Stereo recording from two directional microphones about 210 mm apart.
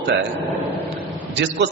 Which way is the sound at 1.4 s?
55° right (ahead or behind).